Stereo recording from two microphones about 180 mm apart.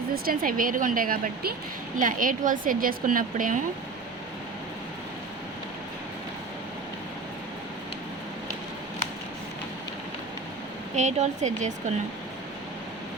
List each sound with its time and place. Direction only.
0.1 s a woman's voice: 55° right (ahead or behind)
10.9 s a woman's voice: 40° right (ahead or behind)